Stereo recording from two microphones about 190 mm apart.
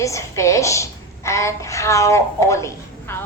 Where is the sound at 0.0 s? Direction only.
15° left (ahead or behind).